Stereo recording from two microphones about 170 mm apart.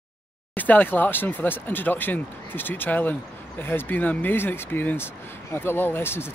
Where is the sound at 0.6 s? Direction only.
10° left (ahead or behind).